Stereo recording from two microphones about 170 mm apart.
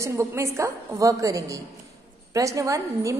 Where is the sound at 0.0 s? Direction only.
15° right (ahead or behind).